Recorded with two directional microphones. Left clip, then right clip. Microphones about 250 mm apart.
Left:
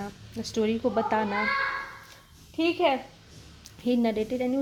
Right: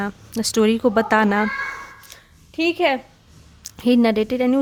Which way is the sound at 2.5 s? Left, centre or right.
Right.